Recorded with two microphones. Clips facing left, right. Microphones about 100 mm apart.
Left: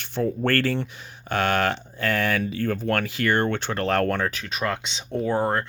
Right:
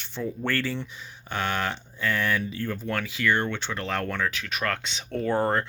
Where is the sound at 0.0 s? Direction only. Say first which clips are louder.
Left 6 dB; 60° left (ahead or behind).